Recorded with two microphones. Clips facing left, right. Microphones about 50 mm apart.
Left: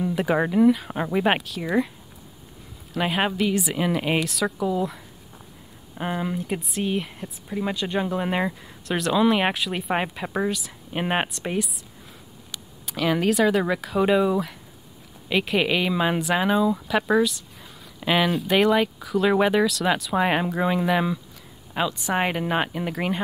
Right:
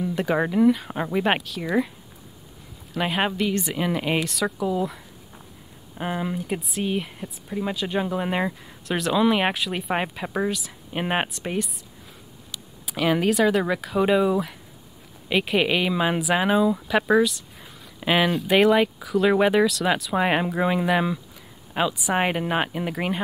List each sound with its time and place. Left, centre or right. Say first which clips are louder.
0.0 s speech: left 1 dB; centre
2.9 s speech: even; centre
12.8 s speech: right 1 dB; centre